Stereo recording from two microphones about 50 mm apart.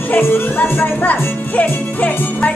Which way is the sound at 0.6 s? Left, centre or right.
Left.